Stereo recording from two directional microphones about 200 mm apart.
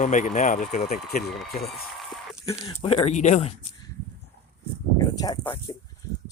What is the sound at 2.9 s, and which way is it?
Speech, 35° left (ahead or behind).